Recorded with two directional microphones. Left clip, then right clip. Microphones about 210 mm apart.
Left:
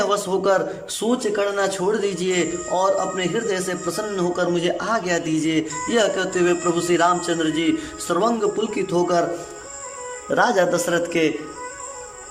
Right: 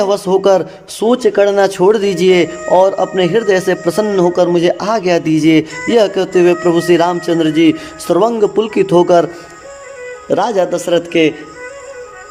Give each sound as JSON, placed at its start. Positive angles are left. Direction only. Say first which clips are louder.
{"t": 0.0, "sound": "a man's voice", "louder": "right 8 dB", "side_deg": -25}
{"t": 10.2, "sound": "speech", "louder": "right 5 dB", "side_deg": -15}